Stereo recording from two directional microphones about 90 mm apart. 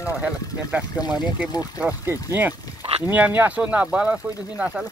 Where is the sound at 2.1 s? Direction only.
25° right (ahead or behind).